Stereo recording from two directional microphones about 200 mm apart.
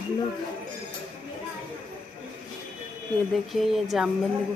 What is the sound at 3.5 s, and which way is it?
Speech, centre (ahead or behind).